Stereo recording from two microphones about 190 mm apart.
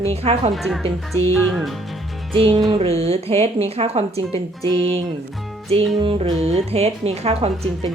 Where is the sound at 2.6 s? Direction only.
30° right (ahead or behind).